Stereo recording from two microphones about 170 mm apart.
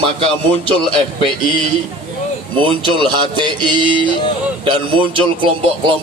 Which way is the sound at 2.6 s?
30° right (ahead or behind).